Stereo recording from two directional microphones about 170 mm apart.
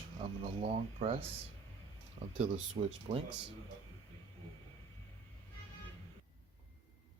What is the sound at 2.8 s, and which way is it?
Speech, 35° right (ahead or behind).